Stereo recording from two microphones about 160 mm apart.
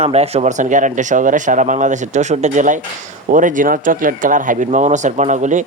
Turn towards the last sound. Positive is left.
turn(degrees=-50)  # may be behind; listen again after turning